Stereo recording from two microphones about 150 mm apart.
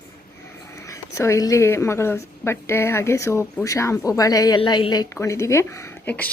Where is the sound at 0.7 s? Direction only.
20° left (ahead or behind).